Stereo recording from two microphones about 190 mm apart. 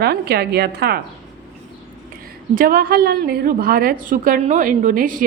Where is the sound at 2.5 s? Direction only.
50° right (ahead or behind).